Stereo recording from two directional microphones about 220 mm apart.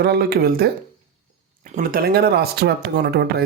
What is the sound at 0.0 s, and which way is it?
Speech, 45° right (ahead or behind).